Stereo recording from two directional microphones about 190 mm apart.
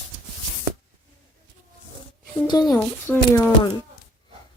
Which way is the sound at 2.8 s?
10° left (ahead or behind).